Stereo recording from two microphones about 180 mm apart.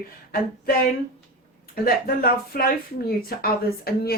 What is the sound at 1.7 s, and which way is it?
A woman's voice, 55° left (ahead or behind).